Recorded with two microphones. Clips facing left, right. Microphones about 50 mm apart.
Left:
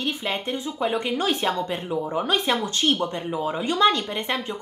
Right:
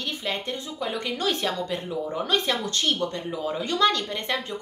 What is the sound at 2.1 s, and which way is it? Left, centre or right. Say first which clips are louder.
A woman's voice: left 2 dB; centre.